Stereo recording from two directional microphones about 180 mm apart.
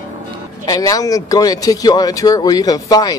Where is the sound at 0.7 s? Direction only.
20° left (ahead or behind).